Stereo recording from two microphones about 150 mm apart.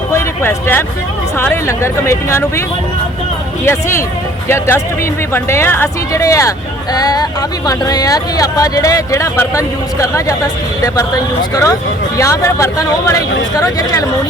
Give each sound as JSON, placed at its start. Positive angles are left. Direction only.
{"t": 0.1, "sound": "speech", "side_deg": 15}
{"t": 3.7, "sound": "speech", "side_deg": 15}